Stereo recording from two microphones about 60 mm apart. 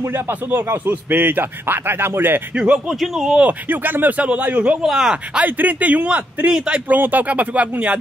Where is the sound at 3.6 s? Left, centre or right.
Right.